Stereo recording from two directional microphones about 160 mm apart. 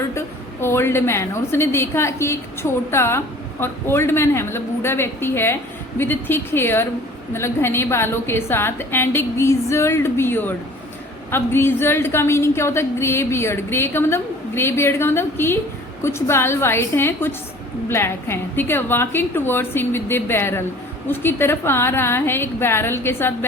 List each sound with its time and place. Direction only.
0.1 s a woman's voice: 15° left (ahead or behind)